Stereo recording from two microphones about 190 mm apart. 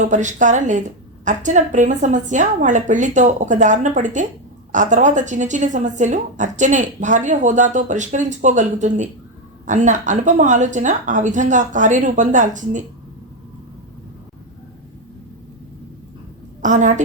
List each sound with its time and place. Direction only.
0.0 s a woman's voice: 40° right (ahead or behind)
16.6 s a woman's voice: 40° right (ahead or behind)